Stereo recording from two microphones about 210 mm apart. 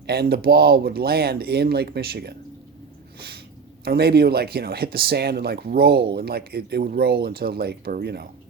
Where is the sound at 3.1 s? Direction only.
50° right (ahead or behind).